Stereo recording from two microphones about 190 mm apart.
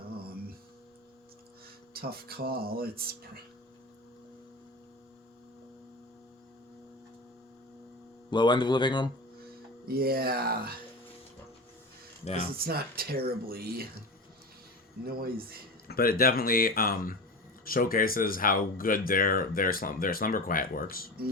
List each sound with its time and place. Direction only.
2.0 s speech: 55° right (ahead or behind)
8.3 s speech: 25° left (ahead or behind)
9.8 s speech: 55° right (ahead or behind)
12.2 s speech: 35° left (ahead or behind)
12.5 s speech: 50° right (ahead or behind)
15.2 s speech: 55° right (ahead or behind)
15.9 s speech: 50° left (ahead or behind)